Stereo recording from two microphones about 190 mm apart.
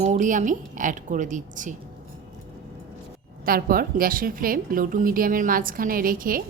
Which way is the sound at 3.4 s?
50° right (ahead or behind).